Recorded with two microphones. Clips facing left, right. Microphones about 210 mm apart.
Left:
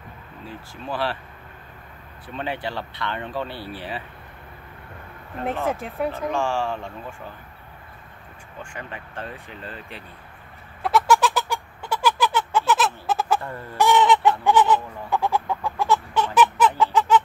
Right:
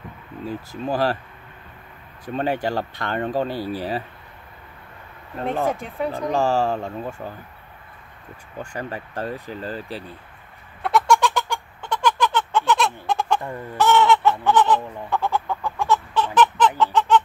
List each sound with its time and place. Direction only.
0.5 s speech: 40° right (ahead or behind)
2.2 s speech: 45° right (ahead or behind)
5.7 s speech: centre (ahead or behind)
6.1 s speech: 40° right (ahead or behind)
8.7 s speech: 40° right (ahead or behind)
10.8 s cat: centre (ahead or behind)
13.7 s chicken: 15° left (ahead or behind)